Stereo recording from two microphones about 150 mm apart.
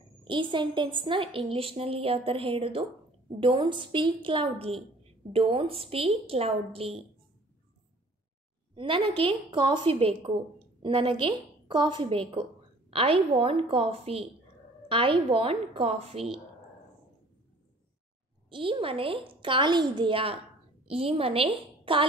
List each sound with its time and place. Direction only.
0.2 s a woman's voice: 35° right (ahead or behind)
8.7 s a woman's voice: 35° right (ahead or behind)
18.5 s a woman's voice: 35° right (ahead or behind)